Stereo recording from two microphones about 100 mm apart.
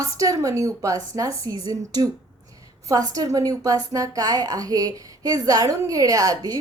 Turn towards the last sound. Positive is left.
turn(degrees=-35)  # may be behind; listen again after turning